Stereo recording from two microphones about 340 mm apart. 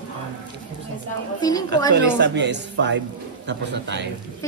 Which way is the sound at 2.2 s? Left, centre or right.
Right.